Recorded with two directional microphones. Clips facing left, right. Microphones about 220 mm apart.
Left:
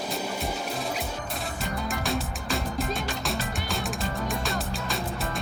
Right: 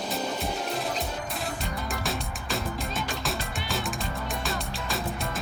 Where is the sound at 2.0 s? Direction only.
Centre (ahead or behind).